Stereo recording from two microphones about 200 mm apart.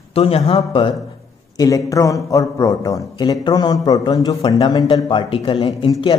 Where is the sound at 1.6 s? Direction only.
15° left (ahead or behind).